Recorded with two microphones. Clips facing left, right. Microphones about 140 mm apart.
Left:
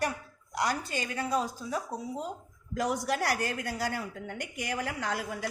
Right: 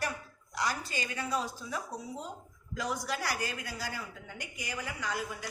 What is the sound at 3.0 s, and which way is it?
A woman's voice, 60° left (ahead or behind).